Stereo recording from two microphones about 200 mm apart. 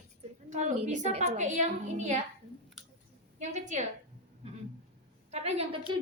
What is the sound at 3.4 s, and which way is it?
Speech, 35° right (ahead or behind).